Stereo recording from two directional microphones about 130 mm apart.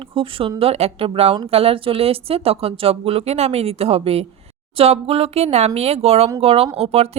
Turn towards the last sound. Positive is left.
turn(degrees=-50)  # may be behind; listen again after turning